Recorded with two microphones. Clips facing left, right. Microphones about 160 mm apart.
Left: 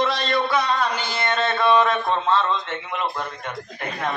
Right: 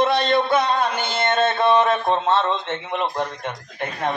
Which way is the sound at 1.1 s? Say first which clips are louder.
Right 5 dB; 25° right (ahead or behind).